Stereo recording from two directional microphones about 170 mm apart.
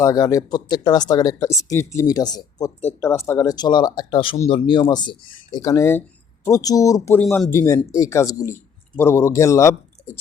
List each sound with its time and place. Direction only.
0.0 s speech: 20° left (ahead or behind)
7.3 s speech: centre (ahead or behind)
7.5 s speech: 15° left (ahead or behind)